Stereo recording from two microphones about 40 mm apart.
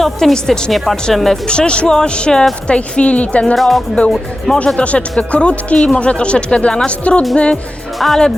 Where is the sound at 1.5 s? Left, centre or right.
Left.